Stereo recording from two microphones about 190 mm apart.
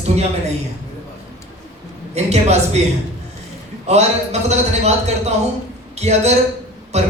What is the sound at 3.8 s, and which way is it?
Speech, 35° right (ahead or behind).